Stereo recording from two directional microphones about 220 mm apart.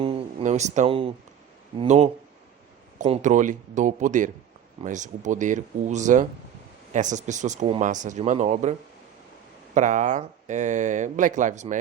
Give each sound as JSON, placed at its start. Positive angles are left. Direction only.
{"t": 0.0, "sound": "a sound", "side_deg": -25}
{"t": 1.8, "sound": "speech", "side_deg": -30}
{"t": 9.7, "sound": "speech", "side_deg": -35}